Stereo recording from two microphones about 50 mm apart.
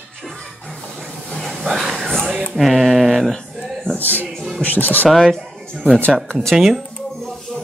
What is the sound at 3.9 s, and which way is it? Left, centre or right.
Speech, left.